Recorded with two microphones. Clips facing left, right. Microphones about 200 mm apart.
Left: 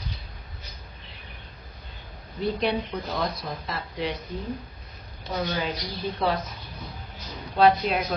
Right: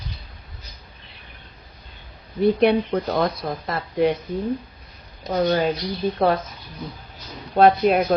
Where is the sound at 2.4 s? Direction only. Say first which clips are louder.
Right 9 dB; 55° right (ahead or behind).